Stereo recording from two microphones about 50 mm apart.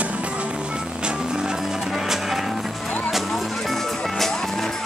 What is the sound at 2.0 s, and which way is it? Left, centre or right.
Music, centre.